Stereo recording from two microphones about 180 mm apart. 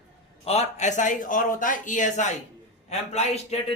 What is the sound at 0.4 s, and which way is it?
A man's voice, 35° left (ahead or behind).